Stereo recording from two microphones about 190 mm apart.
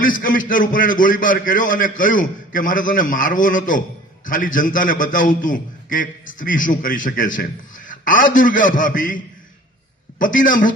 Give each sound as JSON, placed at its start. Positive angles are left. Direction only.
{"t": 0.0, "sound": "a man's voice", "side_deg": 45}